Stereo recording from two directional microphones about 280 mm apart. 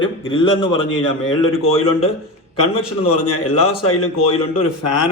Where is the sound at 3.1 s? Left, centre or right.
Left.